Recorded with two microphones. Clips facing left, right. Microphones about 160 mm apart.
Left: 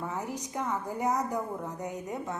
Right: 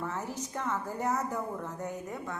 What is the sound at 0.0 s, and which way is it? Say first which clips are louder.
A woman's voice: left 1 dB; 15° left (ahead or behind).